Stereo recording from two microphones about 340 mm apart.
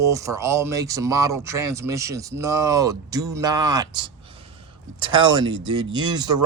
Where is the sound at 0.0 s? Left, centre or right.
Centre.